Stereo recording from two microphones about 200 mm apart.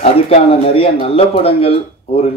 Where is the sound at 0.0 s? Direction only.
30° left (ahead or behind).